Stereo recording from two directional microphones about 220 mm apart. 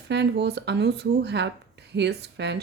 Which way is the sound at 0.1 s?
50° right (ahead or behind).